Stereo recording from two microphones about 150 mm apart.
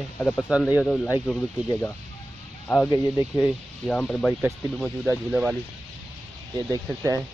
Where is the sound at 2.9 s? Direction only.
25° left (ahead or behind).